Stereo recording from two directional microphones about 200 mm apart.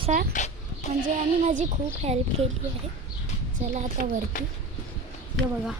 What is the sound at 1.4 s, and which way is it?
A woman's voice, 35° right (ahead or behind).